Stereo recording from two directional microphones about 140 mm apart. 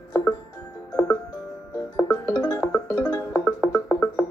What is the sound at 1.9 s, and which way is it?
Music, 25° left (ahead or behind).